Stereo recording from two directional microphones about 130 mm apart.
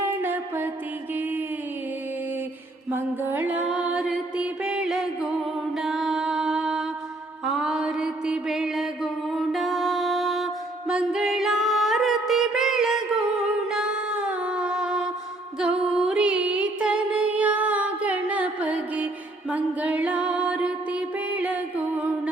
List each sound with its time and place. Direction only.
0.0 s mantra: 15° right (ahead or behind)
2.9 s music: 15° right (ahead or behind)
5.7 s mantra: centre (ahead or behind)
9.3 s music: centre (ahead or behind)